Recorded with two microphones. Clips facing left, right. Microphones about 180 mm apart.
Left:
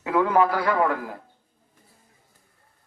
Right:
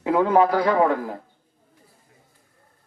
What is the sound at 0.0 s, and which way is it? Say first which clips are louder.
A man's voice: right 3 dB; 25° right (ahead or behind).